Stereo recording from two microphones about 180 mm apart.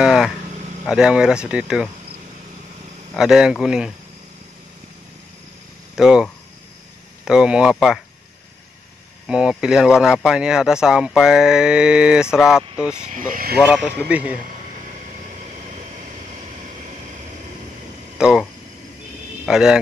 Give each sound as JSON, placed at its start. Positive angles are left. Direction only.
{"t": 0.0, "sound": "a sound", "side_deg": -5}
{"t": 0.8, "sound": "speech", "side_deg": -5}
{"t": 3.2, "sound": "speech", "side_deg": -5}
{"t": 5.9, "sound": "speech", "side_deg": -5}
{"t": 9.3, "sound": "speech", "side_deg": -5}
{"t": 13.0, "sound": "speech", "side_deg": -50}
{"t": 13.6, "sound": "speech", "side_deg": -5}
{"t": 18.1, "sound": "a sound", "side_deg": -5}
{"t": 19.4, "sound": "speech", "side_deg": -5}